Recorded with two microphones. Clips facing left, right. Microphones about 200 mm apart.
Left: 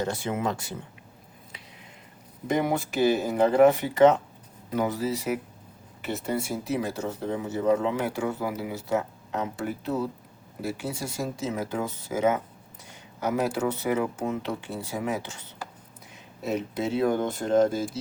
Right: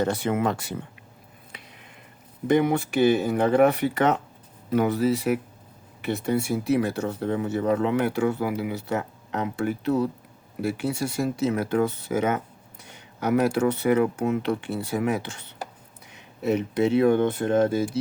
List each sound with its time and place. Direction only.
0.0 s speech: 60° right (ahead or behind)
2.9 s speech: 60° right (ahead or behind)